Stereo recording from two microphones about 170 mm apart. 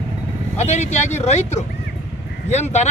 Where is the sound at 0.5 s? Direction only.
40° left (ahead or behind).